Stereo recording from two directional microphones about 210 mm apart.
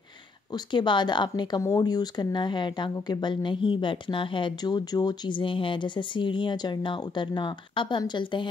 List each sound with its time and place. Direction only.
0.5 s speech: 20° left (ahead or behind)